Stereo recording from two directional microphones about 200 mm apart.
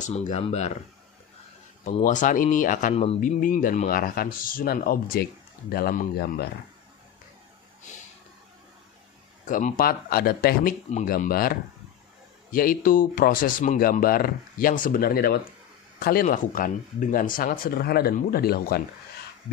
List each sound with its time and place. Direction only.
0.0 s speech: 35° left (ahead or behind)
1.9 s speech: 40° left (ahead or behind)
9.5 s speech: 40° left (ahead or behind)
10.9 s speech: 40° left (ahead or behind)